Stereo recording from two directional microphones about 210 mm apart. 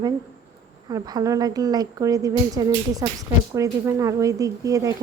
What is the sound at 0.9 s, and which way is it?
A woman's voice, 15° right (ahead or behind).